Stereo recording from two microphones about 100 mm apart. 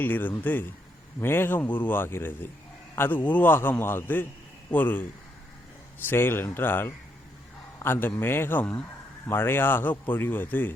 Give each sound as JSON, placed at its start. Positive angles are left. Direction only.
{"t": 0.0, "sound": "speech", "side_deg": 20}
{"t": 6.1, "sound": "speech", "side_deg": 25}